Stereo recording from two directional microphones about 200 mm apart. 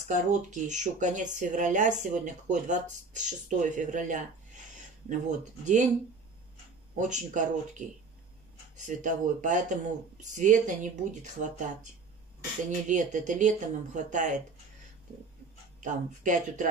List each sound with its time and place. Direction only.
0.1 s speech: 35° right (ahead or behind)
7.0 s speech: 35° right (ahead or behind)
8.8 s speech: 35° right (ahead or behind)
12.6 s speech: 40° right (ahead or behind)
15.8 s speech: 40° right (ahead or behind)